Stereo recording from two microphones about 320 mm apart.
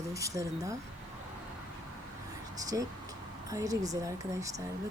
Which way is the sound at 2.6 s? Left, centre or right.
Centre.